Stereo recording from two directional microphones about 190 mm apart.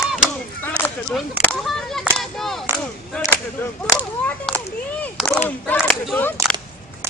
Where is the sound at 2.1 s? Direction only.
Centre (ahead or behind).